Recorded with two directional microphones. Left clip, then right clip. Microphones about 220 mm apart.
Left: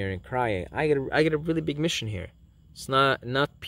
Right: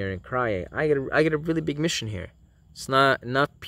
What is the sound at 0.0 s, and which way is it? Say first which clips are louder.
Speech: right 1 dB; 5° right (ahead or behind).